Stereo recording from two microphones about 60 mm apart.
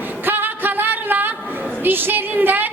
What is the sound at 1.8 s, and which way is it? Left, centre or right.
Speech, right.